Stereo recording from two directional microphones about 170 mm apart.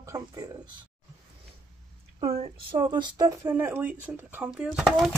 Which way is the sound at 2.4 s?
30° right (ahead or behind).